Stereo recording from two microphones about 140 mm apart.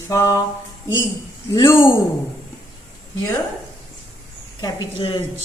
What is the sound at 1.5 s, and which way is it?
Speech, 20° left (ahead or behind).